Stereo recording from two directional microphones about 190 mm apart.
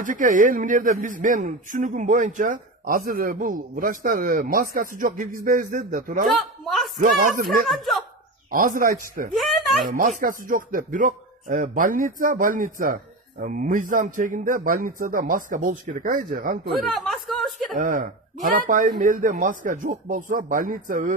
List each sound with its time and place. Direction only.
0.0 s speech: 45° right (ahead or behind)
6.3 s a sound: centre (ahead or behind)
7.0 s speech: 45° right (ahead or behind)
7.6 s speech: centre (ahead or behind)
8.5 s speech: 45° right (ahead or behind)
9.3 s speech: centre (ahead or behind)
9.8 s speech: 45° right (ahead or behind)
16.8 s chuckle: centre (ahead or behind)
17.7 s speech: 45° right (ahead or behind)